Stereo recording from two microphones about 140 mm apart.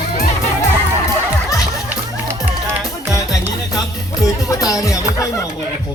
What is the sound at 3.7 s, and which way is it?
Music, 25° left (ahead or behind).